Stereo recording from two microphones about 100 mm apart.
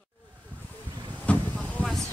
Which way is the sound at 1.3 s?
15° left (ahead or behind).